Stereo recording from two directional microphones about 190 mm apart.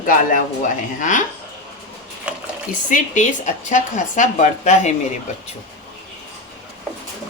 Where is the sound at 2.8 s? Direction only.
40° left (ahead or behind).